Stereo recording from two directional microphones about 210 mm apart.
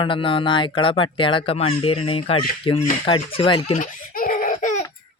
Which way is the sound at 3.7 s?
40° left (ahead or behind).